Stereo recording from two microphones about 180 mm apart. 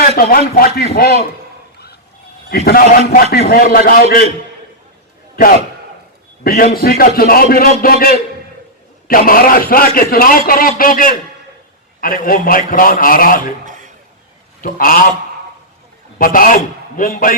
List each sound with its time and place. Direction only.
0.2 s a man's voice: 50° left (ahead or behind)
2.5 s a man's voice: 60° left (ahead or behind)
6.4 s a man's voice: 55° left (ahead or behind)
14.6 s a man's voice: 50° left (ahead or behind)
16.1 s a man's voice: 50° left (ahead or behind)